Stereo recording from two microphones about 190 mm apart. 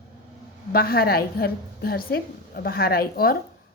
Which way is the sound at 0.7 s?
50° left (ahead or behind).